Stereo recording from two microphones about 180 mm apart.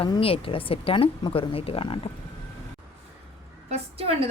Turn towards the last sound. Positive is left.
turn(degrees=-35)  # may be behind; listen again after turning